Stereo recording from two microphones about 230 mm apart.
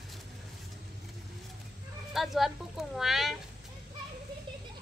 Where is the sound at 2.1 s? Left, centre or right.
Centre.